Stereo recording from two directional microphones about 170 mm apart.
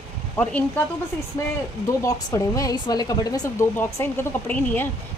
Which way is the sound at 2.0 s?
20° left (ahead or behind).